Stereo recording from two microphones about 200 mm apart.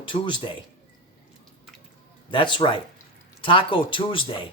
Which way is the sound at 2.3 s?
25° left (ahead or behind).